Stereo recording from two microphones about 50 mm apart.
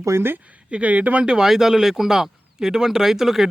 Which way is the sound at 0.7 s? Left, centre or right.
Right.